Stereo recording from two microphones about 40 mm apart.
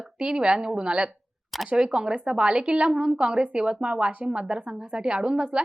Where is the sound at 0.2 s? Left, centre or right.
Right.